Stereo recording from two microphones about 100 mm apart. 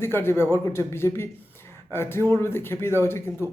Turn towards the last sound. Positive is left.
turn(degrees=25)  # may be behind; listen again after turning